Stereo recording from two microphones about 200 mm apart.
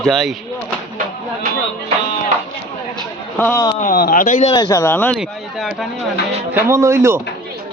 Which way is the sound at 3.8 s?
45° left (ahead or behind).